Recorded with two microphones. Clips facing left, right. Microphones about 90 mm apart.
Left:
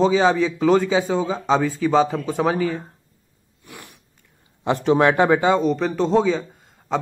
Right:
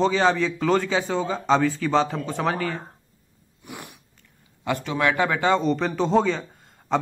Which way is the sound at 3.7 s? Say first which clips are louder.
Right 3 dB; 20° right (ahead or behind).